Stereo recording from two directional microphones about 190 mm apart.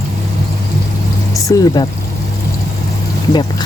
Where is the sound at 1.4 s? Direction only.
20° left (ahead or behind).